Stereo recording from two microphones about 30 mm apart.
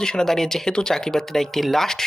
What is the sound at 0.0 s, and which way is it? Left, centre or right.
Speech, left.